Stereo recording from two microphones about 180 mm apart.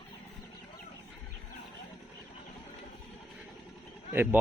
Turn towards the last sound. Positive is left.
turn(degrees=-10)  # may be behind; listen again after turning